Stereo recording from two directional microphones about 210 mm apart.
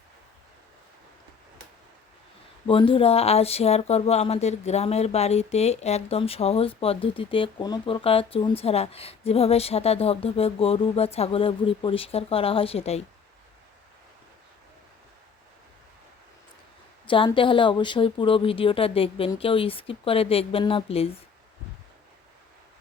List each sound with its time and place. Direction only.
2.6 s speech: 25° left (ahead or behind)
17.1 s speech: 25° left (ahead or behind)